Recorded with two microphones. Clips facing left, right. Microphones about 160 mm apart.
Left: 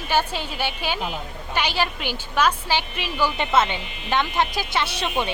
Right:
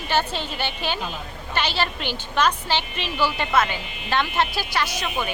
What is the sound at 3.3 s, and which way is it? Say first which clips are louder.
A woman's voice: left 1 dB; 20° left (ahead or behind).